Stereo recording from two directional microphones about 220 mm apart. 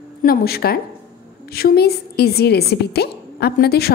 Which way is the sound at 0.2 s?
45° left (ahead or behind).